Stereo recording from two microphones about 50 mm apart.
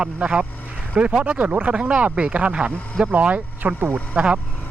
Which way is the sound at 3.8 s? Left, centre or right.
Right.